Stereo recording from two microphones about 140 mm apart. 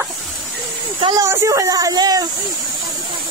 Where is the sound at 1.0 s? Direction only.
25° right (ahead or behind).